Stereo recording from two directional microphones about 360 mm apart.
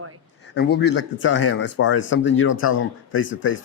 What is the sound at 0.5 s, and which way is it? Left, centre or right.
Speech, left.